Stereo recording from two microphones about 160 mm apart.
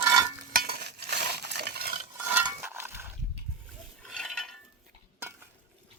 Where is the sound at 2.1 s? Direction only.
10° right (ahead or behind).